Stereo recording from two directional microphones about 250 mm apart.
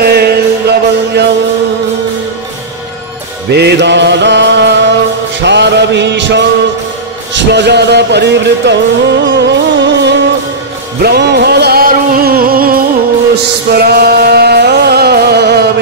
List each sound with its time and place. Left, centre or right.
0.0 s music: right
3.4 s music: right